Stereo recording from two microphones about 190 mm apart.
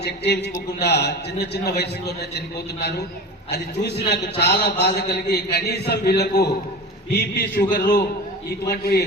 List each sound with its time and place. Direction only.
0.8 s a man's voice: 60° left (ahead or behind)
3.5 s a man's voice: 60° left (ahead or behind); by 8.0 s 45° left (ahead or behind)
8.7 s a man's voice: 55° left (ahead or behind)